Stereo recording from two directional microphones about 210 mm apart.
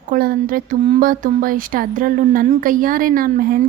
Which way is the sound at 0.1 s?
45° right (ahead or behind).